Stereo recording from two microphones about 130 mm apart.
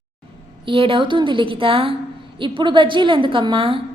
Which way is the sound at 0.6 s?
45° right (ahead or behind).